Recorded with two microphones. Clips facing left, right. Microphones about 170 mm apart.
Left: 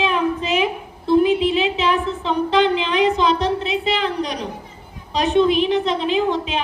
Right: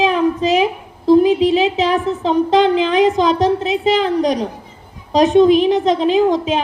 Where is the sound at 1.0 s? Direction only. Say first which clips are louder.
Right 5 dB; 40° right (ahead or behind).